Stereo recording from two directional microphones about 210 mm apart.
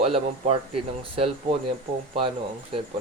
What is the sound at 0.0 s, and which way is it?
Speech, 30° right (ahead or behind).